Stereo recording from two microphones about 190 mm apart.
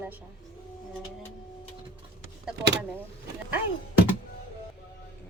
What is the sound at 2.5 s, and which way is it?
Speech, 70° right (ahead or behind).